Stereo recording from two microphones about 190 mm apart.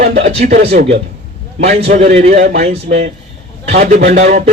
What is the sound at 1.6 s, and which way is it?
A man's voice, 35° right (ahead or behind).